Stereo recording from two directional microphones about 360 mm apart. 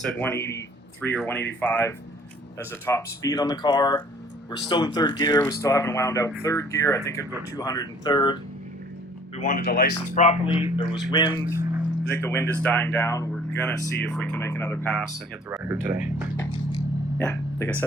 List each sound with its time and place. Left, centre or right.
0.0 s speech: centre
15.4 s speech: centre
16.4 s a sound: centre